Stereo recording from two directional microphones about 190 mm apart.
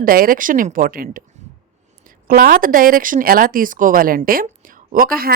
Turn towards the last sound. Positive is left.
turn(degrees=-50)  # may be behind; listen again after turning